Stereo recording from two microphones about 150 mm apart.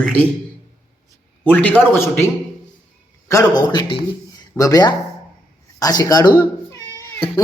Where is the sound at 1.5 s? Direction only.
10° left (ahead or behind).